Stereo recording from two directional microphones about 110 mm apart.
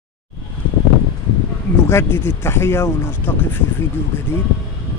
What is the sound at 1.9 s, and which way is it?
Speech, 20° left (ahead or behind).